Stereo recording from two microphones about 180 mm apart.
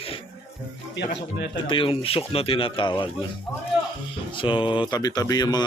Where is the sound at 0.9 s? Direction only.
70° left (ahead or behind).